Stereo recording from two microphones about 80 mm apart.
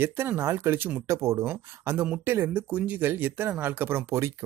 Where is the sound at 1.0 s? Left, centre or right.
Right.